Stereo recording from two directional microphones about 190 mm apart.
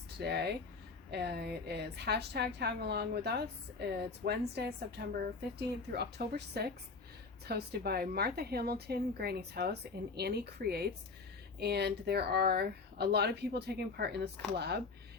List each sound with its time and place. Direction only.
0.2 s speech: 60° right (ahead or behind)